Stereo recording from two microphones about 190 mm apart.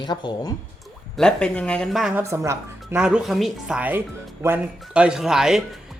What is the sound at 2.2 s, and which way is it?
Speech, 15° right (ahead or behind).